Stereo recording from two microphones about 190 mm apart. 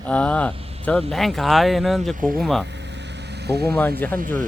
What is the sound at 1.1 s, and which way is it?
Speech, centre (ahead or behind).